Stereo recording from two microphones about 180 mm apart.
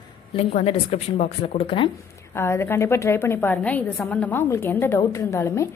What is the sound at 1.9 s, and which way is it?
A woman's voice, 15° left (ahead or behind).